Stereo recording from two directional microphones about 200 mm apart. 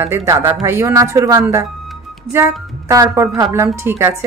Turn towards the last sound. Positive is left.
turn(degrees=-15)  # may be behind; listen again after turning